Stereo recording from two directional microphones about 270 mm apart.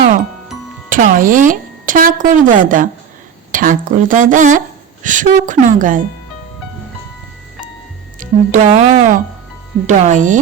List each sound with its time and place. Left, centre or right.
0.9 s a woman's voice: right
8.2 s a woman's voice: right